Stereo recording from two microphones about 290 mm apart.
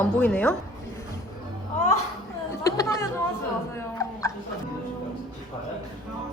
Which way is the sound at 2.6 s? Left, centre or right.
Centre.